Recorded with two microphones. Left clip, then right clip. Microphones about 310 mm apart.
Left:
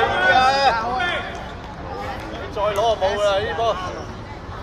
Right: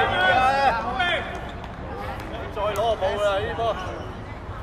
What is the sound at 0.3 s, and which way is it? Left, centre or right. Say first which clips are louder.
Run: left 5 dB; left.